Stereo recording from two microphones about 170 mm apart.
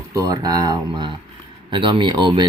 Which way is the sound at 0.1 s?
20° right (ahead or behind).